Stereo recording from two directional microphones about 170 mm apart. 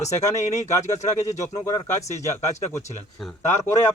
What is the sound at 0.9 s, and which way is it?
Speech, 40° left (ahead or behind).